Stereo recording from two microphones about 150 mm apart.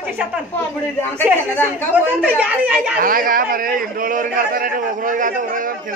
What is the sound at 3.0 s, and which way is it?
A man's voice, 70° right (ahead or behind).